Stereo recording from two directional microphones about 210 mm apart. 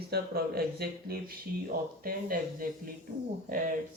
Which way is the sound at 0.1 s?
50° right (ahead or behind).